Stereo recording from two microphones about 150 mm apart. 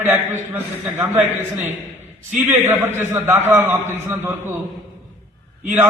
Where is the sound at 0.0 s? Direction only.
15° right (ahead or behind).